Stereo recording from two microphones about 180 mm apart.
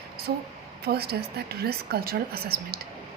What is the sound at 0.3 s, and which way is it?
A woman's voice, 60° right (ahead or behind).